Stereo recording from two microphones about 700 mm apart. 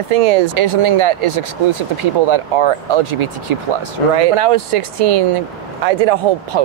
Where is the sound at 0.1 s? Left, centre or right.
Right.